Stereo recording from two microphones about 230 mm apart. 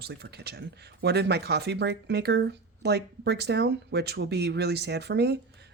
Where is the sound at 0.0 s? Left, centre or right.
Right.